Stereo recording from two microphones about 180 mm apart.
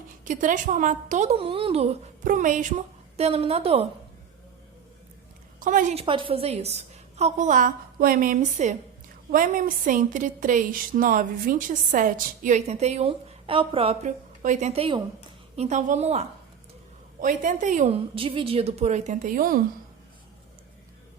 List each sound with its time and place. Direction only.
0.3 s a woman's voice: 45° right (ahead or behind)
2.2 s a woman's voice: 45° right (ahead or behind)
5.5 s a woman's voice: 45° right (ahead or behind)
6.0 s a woman's voice: 30° right (ahead or behind); by 19.6 s 50° right (ahead or behind)